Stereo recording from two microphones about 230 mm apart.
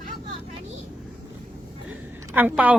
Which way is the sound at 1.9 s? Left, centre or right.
Centre.